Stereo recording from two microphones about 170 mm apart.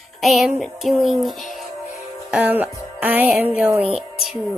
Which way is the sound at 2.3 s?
10° right (ahead or behind).